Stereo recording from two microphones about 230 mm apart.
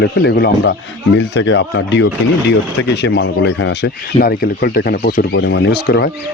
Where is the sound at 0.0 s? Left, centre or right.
Left.